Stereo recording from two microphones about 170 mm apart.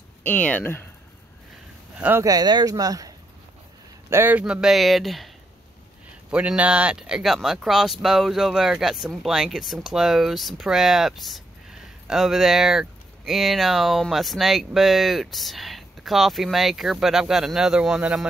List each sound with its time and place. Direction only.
0.2 s speech: 10° left (ahead or behind)
2.0 s speech: 10° right (ahead or behind)
2.2 s speech: 25° right (ahead or behind)
4.1 s speech: 10° right (ahead or behind)
6.3 s speech: 5° right (ahead or behind)